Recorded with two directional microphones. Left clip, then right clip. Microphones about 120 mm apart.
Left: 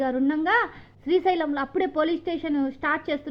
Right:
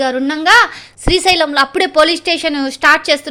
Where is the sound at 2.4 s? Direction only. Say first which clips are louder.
Right 11 dB; 50° right (ahead or behind).